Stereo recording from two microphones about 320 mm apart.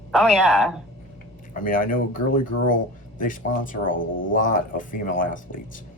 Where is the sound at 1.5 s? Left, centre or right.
Left.